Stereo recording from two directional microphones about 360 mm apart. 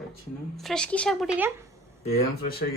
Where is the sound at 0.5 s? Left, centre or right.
Centre.